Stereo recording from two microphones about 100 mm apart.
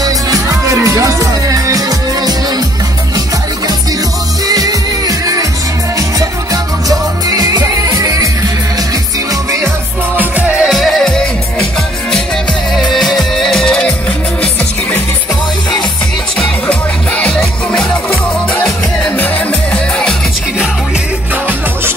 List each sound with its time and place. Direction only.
0.0 s music: 35° right (ahead or behind)
4.5 s music: 40° right (ahead or behind)
10.1 s music: 10° right (ahead or behind)
10.7 s music: centre (ahead or behind)
12.7 s music: centre (ahead or behind)
17.2 s music: 10° left (ahead or behind)